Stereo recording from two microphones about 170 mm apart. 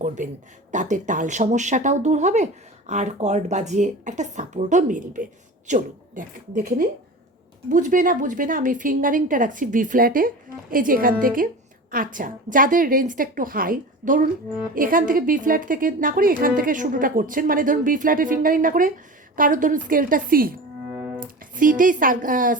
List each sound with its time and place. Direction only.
0.2 s a woman's voice: 50° right (ahead or behind)
20.9 s music: 10° right (ahead or behind)
21.2 s speech: 50° right (ahead or behind)